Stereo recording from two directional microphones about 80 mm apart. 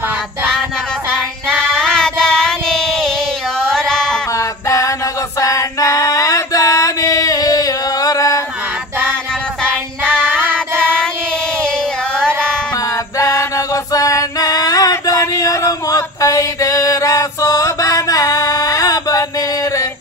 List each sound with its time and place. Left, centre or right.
1.6 s music: centre
4.6 s music: left
10.2 s child singing: right
13.2 s music: left
13.9 s a sound: left